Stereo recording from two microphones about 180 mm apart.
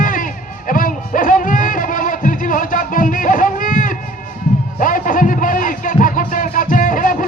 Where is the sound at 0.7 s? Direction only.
50° left (ahead or behind).